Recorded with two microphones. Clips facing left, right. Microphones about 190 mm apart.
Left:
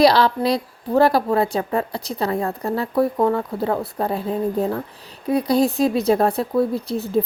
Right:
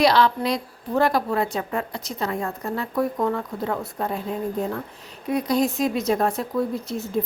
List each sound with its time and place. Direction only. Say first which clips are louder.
0.0 s a woman's voice: left 3 dB; 35° left (ahead or behind)